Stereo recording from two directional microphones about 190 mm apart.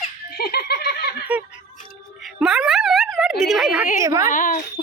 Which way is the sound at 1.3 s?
5° right (ahead or behind).